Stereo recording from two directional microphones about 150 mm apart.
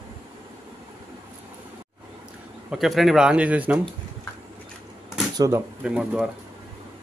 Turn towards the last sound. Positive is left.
turn(degrees=-5)  # may be behind; listen again after turning